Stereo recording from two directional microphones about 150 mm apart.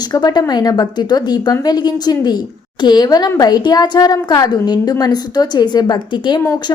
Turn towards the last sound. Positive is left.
turn(degrees=30)  # may be behind; listen again after turning